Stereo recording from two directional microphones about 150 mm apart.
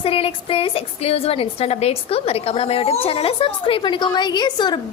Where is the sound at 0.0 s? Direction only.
40° left (ahead or behind).